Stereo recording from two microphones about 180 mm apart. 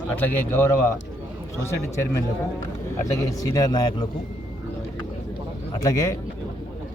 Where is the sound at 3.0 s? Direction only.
20° left (ahead or behind).